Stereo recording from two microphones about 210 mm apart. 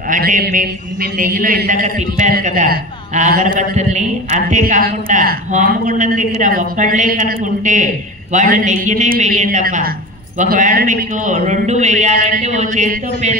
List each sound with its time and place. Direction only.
0.1 s a man's voice: 40° right (ahead or behind)